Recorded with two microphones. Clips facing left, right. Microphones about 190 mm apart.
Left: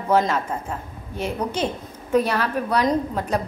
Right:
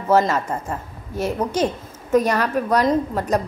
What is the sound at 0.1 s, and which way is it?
A woman's voice, 5° right (ahead or behind).